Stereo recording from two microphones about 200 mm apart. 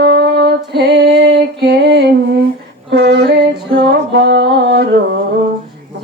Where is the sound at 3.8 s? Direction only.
55° right (ahead or behind).